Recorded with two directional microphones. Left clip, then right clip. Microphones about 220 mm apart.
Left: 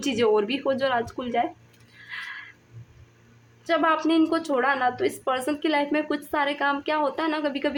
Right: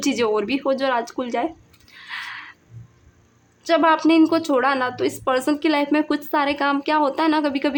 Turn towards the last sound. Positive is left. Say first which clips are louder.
# right 6 dB
turn(degrees=-25)  # may be behind; listen again after turning